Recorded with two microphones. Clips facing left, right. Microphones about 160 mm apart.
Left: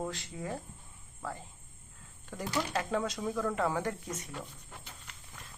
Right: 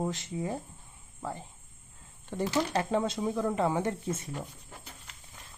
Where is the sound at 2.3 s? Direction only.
25° right (ahead or behind).